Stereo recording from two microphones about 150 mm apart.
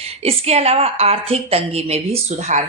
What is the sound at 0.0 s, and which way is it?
A woman's voice, 40° right (ahead or behind).